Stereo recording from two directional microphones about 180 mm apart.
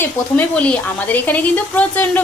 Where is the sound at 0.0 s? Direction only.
10° left (ahead or behind).